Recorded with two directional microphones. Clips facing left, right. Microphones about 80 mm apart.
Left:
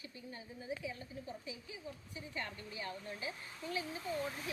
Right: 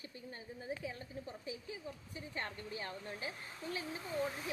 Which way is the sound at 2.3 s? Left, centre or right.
Right.